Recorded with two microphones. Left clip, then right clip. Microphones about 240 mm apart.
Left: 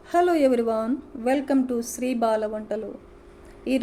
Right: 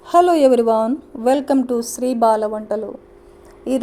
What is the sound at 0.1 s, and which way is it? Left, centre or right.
A woman's voice, right.